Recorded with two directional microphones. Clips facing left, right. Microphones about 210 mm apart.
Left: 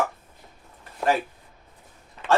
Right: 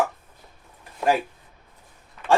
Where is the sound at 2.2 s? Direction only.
30° left (ahead or behind).